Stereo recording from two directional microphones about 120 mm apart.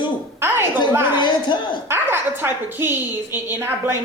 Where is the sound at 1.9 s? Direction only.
20° right (ahead or behind).